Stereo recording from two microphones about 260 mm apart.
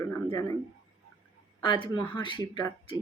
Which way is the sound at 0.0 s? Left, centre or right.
Centre.